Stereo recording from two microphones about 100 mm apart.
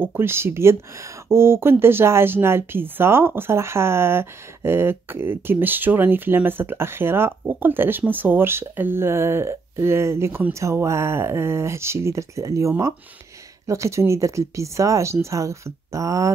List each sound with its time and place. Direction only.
0.0 s speech: 20° right (ahead or behind)